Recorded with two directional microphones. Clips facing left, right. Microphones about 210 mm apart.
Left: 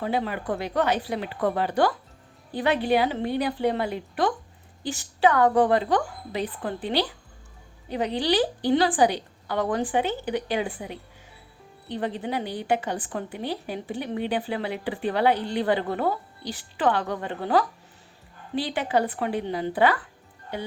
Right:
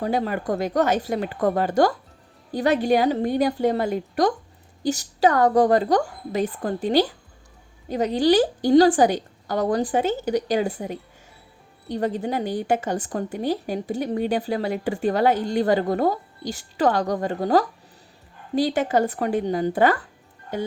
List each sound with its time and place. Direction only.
0.0 s a woman's voice: 40° right (ahead or behind)